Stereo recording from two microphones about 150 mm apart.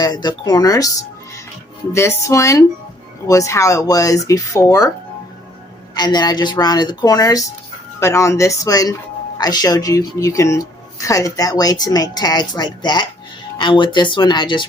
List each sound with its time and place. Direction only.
0.0 s speech: 30° left (ahead or behind)
5.9 s speech: 25° left (ahead or behind)